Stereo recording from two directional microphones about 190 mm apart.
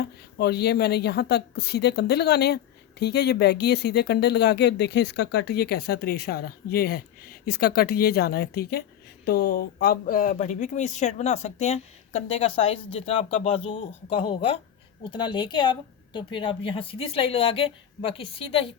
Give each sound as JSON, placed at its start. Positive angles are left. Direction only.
{"t": 0.3, "sound": "a woman's voice", "side_deg": 60}